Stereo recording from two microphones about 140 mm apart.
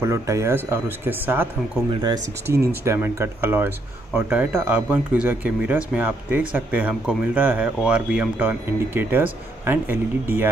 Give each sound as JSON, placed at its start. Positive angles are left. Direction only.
{"t": 0.0, "sound": "speech", "side_deg": -20}
{"t": 1.9, "sound": "speech", "side_deg": -35}
{"t": 2.4, "sound": "speech", "side_deg": -20}